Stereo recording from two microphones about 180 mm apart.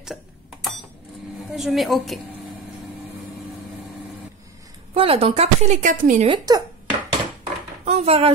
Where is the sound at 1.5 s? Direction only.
Centre (ahead or behind).